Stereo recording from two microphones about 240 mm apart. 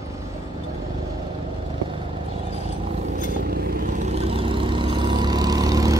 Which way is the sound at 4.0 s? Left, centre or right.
Right.